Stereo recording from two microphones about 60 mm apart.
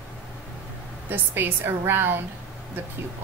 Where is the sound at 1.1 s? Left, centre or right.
Right.